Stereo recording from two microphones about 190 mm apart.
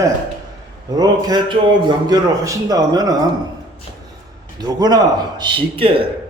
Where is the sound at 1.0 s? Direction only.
20° right (ahead or behind).